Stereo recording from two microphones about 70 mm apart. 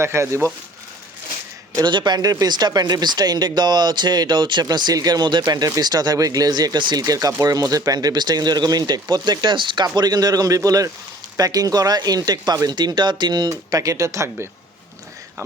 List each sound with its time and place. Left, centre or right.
0.0 s speech: right
1.7 s speech: right
13.7 s speech: right